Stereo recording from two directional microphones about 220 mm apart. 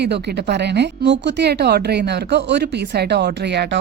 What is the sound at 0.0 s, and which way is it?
A woman's voice, 50° right (ahead or behind).